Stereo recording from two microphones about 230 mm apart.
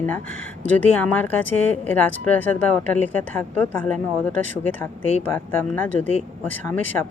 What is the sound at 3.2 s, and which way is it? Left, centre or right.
Speech, centre.